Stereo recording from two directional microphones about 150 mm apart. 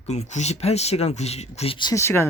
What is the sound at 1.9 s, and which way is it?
Speech, 15° left (ahead or behind).